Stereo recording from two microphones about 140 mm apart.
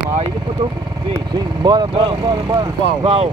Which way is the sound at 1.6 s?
35° right (ahead or behind).